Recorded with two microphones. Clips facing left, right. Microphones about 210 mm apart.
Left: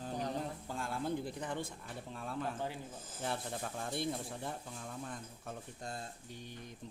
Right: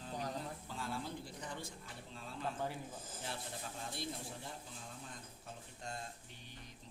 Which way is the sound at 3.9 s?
55° left (ahead or behind).